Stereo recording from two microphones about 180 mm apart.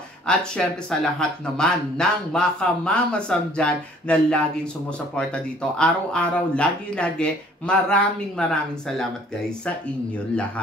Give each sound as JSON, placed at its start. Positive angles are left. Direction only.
{"t": 0.3, "sound": "speech", "side_deg": 5}